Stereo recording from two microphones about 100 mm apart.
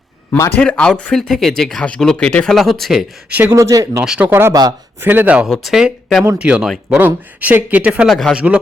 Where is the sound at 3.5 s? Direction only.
35° right (ahead or behind).